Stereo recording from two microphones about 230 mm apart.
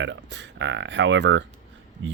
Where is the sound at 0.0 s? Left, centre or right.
Right.